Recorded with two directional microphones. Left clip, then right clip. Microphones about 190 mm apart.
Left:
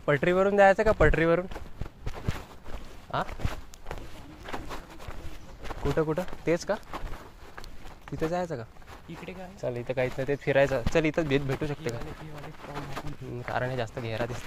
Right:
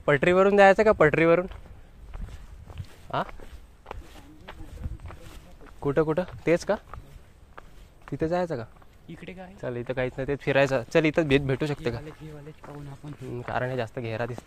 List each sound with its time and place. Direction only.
0.0 s speech: 65° right (ahead or behind)
3.9 s walk: 55° left (ahead or behind)
4.5 s a sound: 65° left (ahead or behind)
5.9 s speech: 60° right (ahead or behind)
8.3 s speech: 55° right (ahead or behind)
9.2 s speech: 40° right (ahead or behind); by 12.0 s 60° right (ahead or behind)
12.6 s speech: 45° left (ahead or behind)
13.3 s speech: 50° right (ahead or behind)